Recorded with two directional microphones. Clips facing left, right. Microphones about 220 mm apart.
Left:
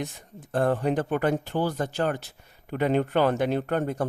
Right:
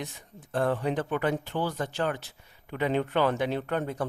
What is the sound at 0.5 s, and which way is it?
Speech, 40° left (ahead or behind).